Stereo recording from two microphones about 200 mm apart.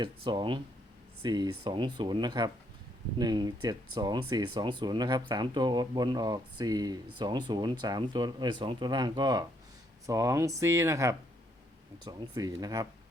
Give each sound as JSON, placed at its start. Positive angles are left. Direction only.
{"t": 0.0, "sound": "speech", "side_deg": -25}